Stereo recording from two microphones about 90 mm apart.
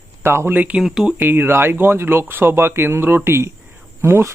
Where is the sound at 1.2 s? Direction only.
25° right (ahead or behind).